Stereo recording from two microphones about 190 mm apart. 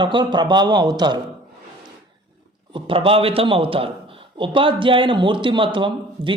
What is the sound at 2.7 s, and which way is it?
Speech, 30° right (ahead or behind).